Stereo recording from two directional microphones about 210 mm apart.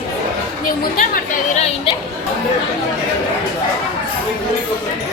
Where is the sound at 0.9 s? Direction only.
35° left (ahead or behind).